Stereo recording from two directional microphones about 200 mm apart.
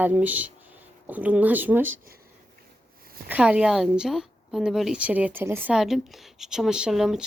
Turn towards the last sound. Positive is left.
turn(degrees=0)  # may be behind; listen again after turning